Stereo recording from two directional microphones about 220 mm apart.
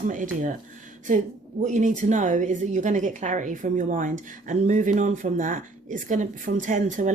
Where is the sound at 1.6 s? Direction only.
35° right (ahead or behind).